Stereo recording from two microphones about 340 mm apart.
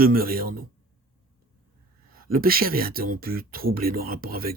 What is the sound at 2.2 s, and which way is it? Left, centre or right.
Speech, right.